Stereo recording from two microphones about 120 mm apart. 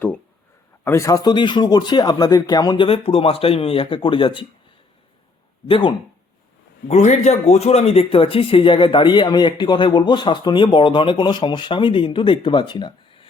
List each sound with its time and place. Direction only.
0.9 s speech: 25° left (ahead or behind)
2.8 s speech: 55° left (ahead or behind)
5.6 s speech: 50° left (ahead or behind)
6.8 s speech: 75° left (ahead or behind); by 13.2 s 40° left (ahead or behind)